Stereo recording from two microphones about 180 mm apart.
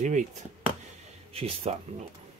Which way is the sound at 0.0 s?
45° right (ahead or behind).